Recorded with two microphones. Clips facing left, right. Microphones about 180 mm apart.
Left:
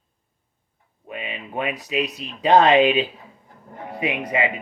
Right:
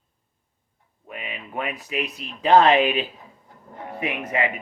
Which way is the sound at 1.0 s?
20° left (ahead or behind).